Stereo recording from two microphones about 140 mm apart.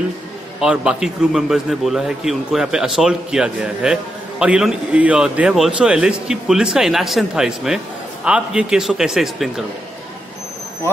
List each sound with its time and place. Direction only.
0.6 s a man's voice: 5° right (ahead or behind)